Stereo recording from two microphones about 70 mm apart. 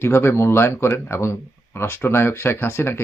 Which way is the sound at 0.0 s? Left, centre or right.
Left.